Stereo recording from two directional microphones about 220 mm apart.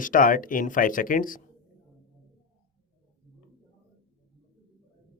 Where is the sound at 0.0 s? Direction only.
40° left (ahead or behind).